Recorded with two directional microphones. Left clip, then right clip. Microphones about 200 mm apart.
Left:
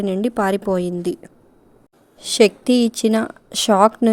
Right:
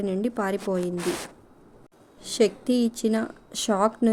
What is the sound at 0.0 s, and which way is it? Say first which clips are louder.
Speech: left 7 dB; 45° left (ahead or behind).